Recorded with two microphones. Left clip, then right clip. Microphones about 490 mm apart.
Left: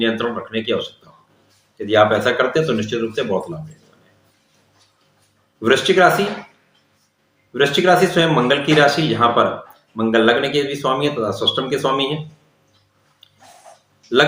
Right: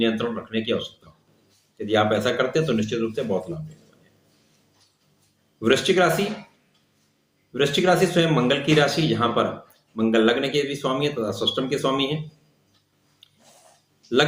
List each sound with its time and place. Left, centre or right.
0.0 s a man's voice: right
5.6 s a man's voice: right
7.5 s a man's voice: right